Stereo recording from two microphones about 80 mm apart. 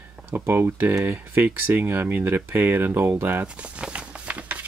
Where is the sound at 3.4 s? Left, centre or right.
Centre.